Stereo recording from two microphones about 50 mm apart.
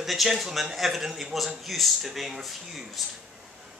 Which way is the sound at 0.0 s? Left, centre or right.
Centre.